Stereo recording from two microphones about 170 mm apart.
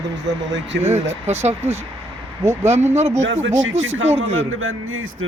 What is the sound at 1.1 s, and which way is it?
Speech, 40° right (ahead or behind).